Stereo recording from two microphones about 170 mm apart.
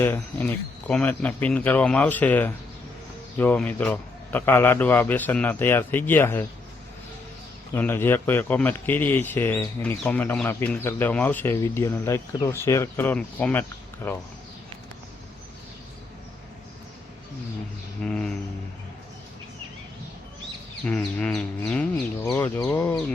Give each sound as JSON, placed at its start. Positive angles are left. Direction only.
{"t": 0.0, "sound": "a man's voice", "side_deg": 15}
{"t": 7.7, "sound": "a man's voice", "side_deg": 15}
{"t": 18.0, "sound": "a sound", "side_deg": 5}
{"t": 20.8, "sound": "a man's voice", "side_deg": 5}